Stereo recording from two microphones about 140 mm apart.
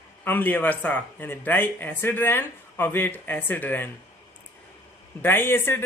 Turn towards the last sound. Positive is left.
turn(degrees=15)  # may be behind; listen again after turning